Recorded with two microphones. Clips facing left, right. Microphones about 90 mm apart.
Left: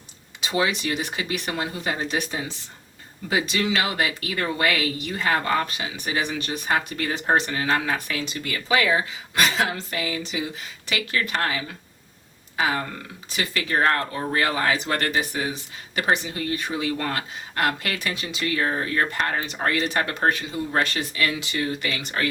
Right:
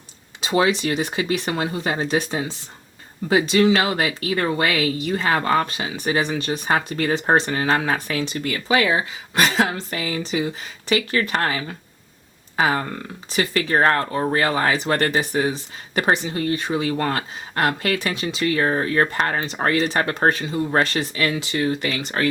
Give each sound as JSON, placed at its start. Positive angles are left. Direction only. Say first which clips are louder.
{"t": 0.5, "sound": "speech", "louder": "right 5 dB", "side_deg": -35}